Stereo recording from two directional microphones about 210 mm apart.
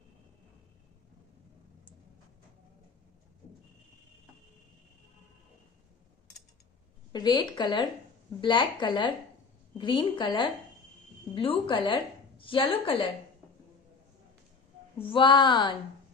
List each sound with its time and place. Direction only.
7.1 s a woman's voice: 20° left (ahead or behind)
15.0 s a woman's voice: 25° left (ahead or behind)